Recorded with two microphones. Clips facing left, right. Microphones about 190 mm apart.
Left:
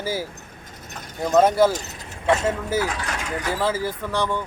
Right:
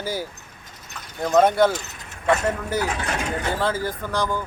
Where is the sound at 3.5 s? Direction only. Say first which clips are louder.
Even; 5° left (ahead or behind).